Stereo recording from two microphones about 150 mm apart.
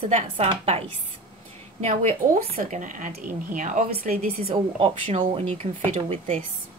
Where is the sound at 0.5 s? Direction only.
40° right (ahead or behind).